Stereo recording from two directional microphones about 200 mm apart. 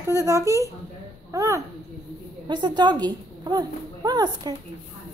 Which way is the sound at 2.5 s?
20° right (ahead or behind).